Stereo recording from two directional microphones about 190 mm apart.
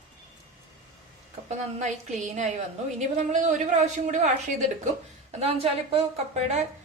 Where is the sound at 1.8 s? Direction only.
40° right (ahead or behind).